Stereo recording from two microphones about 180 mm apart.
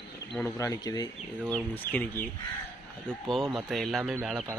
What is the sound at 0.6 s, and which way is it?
Speech, 20° left (ahead or behind).